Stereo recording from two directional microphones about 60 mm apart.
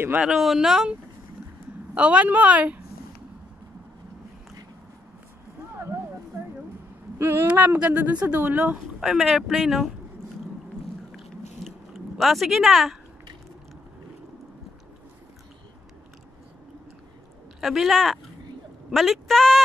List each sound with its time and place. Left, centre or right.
0.3 s speech: centre
2.0 s speech: right
5.8 s a sound: right
7.2 s speech: right
7.4 s speech: right
9.0 s speech: centre
11.6 s a sound: centre
17.6 s a woman's voice: centre